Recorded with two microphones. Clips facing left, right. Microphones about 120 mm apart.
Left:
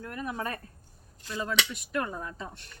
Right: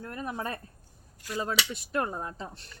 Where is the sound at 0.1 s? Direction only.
30° right (ahead or behind).